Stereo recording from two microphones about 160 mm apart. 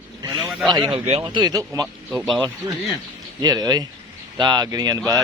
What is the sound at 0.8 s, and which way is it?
Speech, 35° right (ahead or behind).